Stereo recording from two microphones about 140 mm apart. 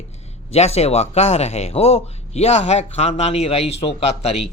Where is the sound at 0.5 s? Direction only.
50° left (ahead or behind).